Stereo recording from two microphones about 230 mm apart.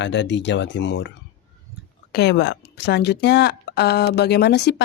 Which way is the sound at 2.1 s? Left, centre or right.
Left.